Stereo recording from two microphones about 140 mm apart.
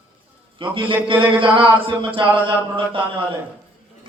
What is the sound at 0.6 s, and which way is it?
Speech, 40° right (ahead or behind).